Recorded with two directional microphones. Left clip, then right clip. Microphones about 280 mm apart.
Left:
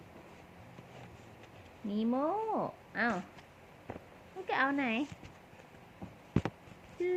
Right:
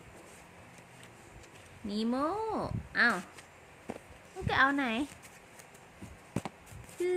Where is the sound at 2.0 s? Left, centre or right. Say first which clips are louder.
Even; right.